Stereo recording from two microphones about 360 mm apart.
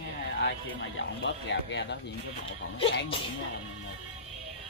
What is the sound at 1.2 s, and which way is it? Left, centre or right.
Speech, left.